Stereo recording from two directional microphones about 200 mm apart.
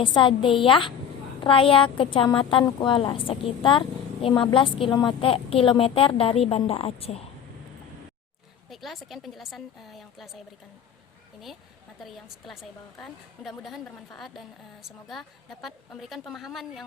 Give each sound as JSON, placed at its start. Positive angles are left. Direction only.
{"t": 0.0, "sound": "a woman's voice", "side_deg": 25}
{"t": 8.7, "sound": "a woman's voice", "side_deg": 0}
{"t": 11.9, "sound": "a woman's voice", "side_deg": 0}